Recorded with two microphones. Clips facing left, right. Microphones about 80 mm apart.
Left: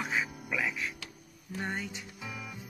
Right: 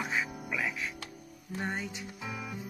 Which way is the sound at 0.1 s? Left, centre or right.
Centre.